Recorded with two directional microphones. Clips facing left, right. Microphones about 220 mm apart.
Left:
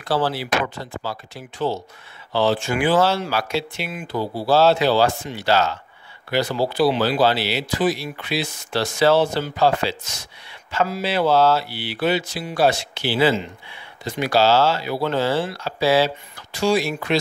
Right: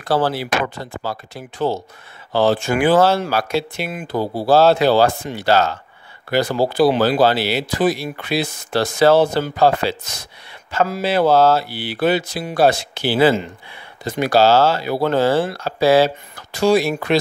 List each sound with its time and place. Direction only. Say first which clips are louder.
0.0 s speech: right 3 dB; 50° right (ahead or behind)